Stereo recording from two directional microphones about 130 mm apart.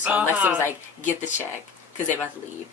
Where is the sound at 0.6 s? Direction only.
20° left (ahead or behind).